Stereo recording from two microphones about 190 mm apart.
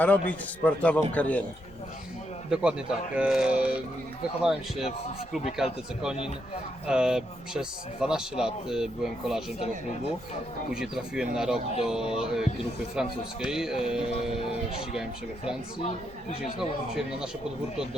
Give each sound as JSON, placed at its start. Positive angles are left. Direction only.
{"t": 0.0, "sound": "a man's voice", "side_deg": 10}
{"t": 2.5, "sound": "a man's voice", "side_deg": -5}
{"t": 6.8, "sound": "a man's voice", "side_deg": -5}
{"t": 10.7, "sound": "a man's voice", "side_deg": -5}
{"t": 16.6, "sound": "a man's voice", "side_deg": -5}